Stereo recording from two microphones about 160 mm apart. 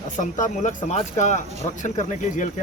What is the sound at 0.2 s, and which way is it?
Speech, 55° left (ahead or behind).